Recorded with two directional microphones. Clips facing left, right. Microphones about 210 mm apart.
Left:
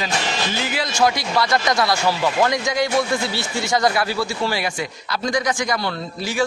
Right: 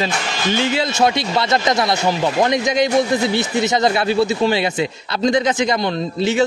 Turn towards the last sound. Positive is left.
turn(degrees=-25)  # may be behind; listen again after turning